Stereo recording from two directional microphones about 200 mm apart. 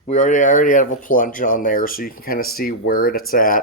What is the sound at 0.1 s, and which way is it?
Speech, 40° left (ahead or behind).